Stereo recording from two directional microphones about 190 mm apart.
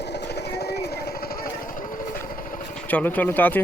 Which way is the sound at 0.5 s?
60° left (ahead or behind).